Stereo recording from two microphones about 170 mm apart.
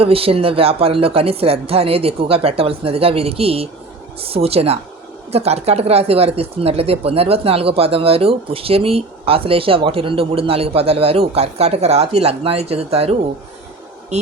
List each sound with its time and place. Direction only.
0.0 s speech: 35° right (ahead or behind)